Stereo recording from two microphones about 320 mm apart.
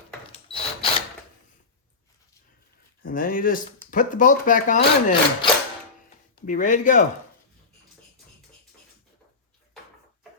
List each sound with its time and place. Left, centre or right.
0.3 s tools: centre
3.0 s speech: left